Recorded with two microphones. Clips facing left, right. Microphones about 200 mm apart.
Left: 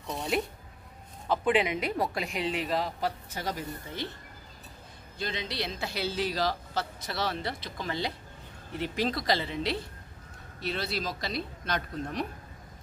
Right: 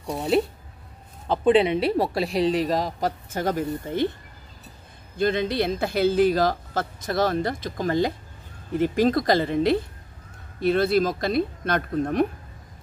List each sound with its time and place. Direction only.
1.3 s speech: 30° right (ahead or behind); by 4.1 s 50° right (ahead or behind)
5.1 s speech: 55° right (ahead or behind)